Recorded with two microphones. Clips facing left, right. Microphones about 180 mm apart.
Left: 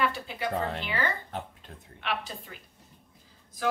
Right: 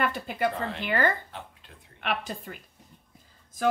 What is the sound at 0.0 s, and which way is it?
A woman's voice, 50° right (ahead or behind).